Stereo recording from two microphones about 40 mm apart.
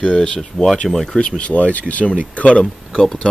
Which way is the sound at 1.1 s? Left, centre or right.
Left.